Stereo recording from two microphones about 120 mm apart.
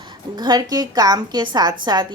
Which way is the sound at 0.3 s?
35° right (ahead or behind).